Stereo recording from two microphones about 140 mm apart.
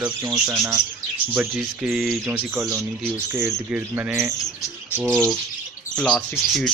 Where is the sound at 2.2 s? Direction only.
15° right (ahead or behind).